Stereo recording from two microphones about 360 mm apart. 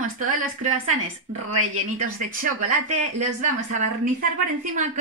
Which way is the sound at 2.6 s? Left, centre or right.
Right.